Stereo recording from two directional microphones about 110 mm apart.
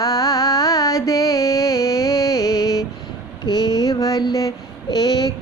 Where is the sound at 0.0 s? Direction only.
30° left (ahead or behind).